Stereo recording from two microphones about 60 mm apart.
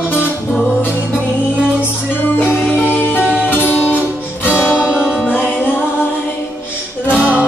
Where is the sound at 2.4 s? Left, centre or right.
Left.